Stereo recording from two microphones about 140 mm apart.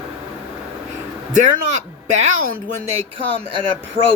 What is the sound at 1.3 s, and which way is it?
Speech, 60° right (ahead or behind).